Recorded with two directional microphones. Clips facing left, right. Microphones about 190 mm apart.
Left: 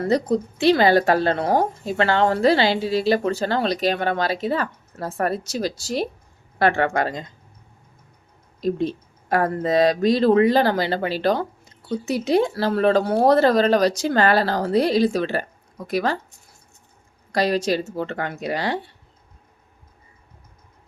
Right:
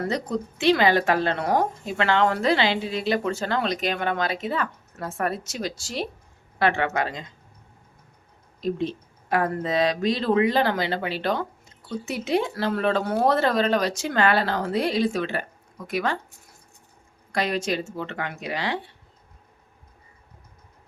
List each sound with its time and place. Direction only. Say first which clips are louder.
0.0 s a woman's voice: left 6 dB; 35° left (ahead or behind)
8.6 s a woman's voice: left 4 dB; 40° left (ahead or behind)
17.3 s a woman's voice: left 5 dB; 35° left (ahead or behind)